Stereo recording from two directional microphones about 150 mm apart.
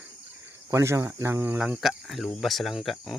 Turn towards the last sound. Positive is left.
turn(degrees=0)  # may be behind; listen again after turning